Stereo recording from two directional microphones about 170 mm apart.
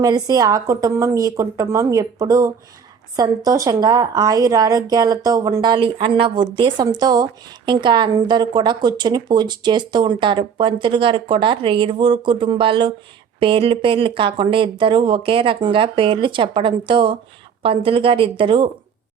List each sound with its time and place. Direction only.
0.0 s a woman's voice: 20° right (ahead or behind)